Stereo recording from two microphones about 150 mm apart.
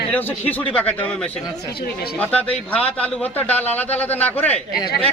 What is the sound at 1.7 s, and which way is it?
Speech, 90° left.